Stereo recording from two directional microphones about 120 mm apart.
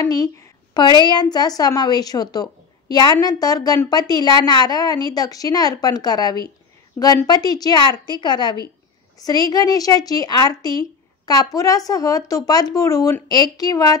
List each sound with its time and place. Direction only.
0.0 s a woman's voice: 30° left (ahead or behind)